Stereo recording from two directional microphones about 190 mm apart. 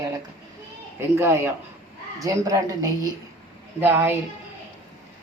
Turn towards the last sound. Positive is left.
turn(degrees=-10)  # may be behind; listen again after turning